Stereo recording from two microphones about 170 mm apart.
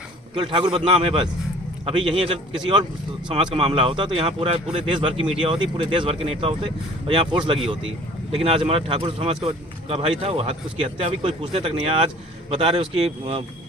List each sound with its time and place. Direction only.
0.3 s speech: 30° right (ahead or behind)